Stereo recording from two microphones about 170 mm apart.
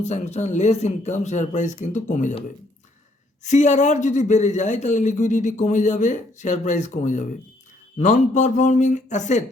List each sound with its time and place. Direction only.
0.0 s speech: 40° left (ahead or behind)
3.4 s speech: 45° left (ahead or behind)